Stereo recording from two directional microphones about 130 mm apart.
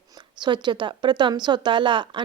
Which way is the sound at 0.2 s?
35° right (ahead or behind).